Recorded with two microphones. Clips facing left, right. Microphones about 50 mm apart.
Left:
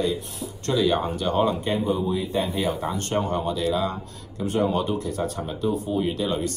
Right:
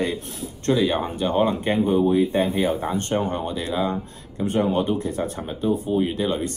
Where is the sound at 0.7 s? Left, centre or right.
Right.